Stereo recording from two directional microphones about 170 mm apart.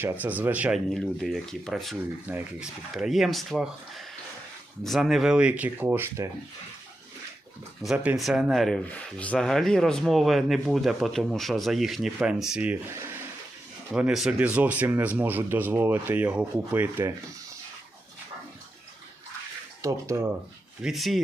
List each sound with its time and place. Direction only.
0.0 s speech: 10° right (ahead or behind)
7.9 s speech: 5° right (ahead or behind)
19.8 s speech: 15° right (ahead or behind)
20.8 s speech: centre (ahead or behind)